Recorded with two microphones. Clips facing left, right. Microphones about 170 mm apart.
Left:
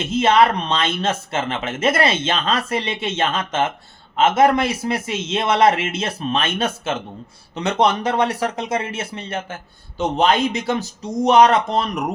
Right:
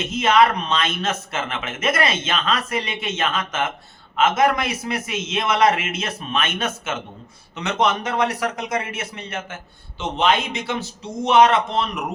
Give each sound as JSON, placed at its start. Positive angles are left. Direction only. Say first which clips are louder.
{"t": 0.0, "sound": "a man's voice", "louder": "left 2 dB", "side_deg": 30}